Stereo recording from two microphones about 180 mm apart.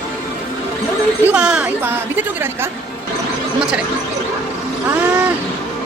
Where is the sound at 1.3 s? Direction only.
5° right (ahead or behind).